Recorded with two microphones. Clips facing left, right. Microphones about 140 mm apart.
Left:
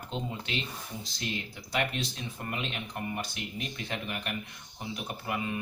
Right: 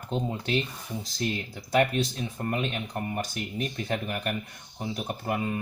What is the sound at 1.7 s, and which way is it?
Speech, 45° right (ahead or behind).